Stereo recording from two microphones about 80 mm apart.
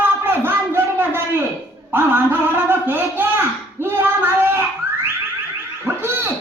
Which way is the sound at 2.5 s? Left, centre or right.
Right.